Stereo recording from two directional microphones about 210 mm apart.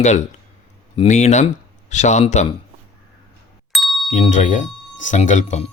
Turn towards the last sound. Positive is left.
turn(degrees=35)  # may be behind; listen again after turning